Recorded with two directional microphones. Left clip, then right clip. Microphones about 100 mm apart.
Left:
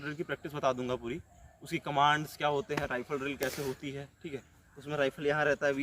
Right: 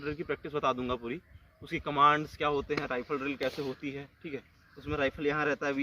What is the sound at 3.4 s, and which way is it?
Speech, 80° left.